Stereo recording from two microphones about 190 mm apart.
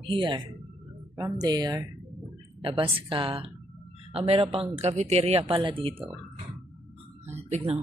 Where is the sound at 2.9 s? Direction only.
30° right (ahead or behind).